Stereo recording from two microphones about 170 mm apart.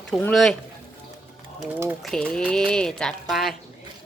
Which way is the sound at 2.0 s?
5° left (ahead or behind).